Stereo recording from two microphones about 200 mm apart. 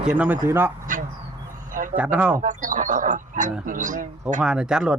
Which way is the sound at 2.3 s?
40° right (ahead or behind).